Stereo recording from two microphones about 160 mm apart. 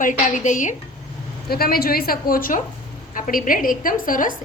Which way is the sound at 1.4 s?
70° left (ahead or behind).